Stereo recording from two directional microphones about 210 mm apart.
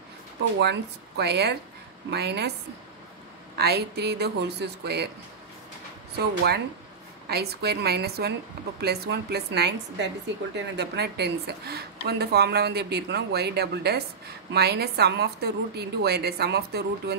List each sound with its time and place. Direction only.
0.6 s a woman's voice: 55° right (ahead or behind)
3.5 s a woman's voice: 50° right (ahead or behind)
6.1 s a woman's voice: 50° right (ahead or behind)